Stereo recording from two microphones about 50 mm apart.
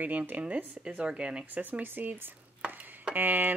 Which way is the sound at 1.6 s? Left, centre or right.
Right.